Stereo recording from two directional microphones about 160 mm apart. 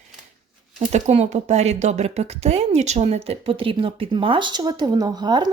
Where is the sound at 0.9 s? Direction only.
45° right (ahead or behind).